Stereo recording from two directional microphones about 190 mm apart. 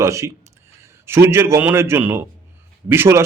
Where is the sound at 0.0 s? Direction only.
15° right (ahead or behind).